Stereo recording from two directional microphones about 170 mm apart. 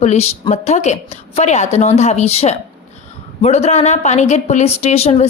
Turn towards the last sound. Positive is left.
turn(degrees=40)  # may be behind; listen again after turning